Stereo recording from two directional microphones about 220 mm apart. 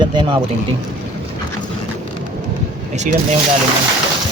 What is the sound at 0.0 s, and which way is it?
Speech, 20° right (ahead or behind).